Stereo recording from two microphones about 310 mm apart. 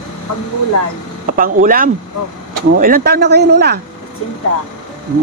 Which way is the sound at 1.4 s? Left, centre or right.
Right.